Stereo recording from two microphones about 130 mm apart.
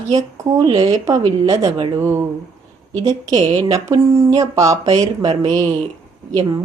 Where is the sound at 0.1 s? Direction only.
25° right (ahead or behind).